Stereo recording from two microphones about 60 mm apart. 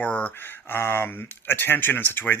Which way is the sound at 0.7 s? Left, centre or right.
Left.